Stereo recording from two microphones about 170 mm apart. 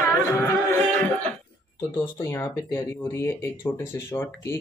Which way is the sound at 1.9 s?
15° left (ahead or behind).